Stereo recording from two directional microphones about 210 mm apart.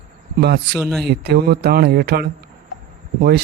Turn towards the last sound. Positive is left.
turn(degrees=-50)  # may be behind; listen again after turning